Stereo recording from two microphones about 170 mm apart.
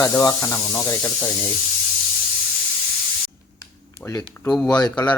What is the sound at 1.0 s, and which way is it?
Speech, centre (ahead or behind).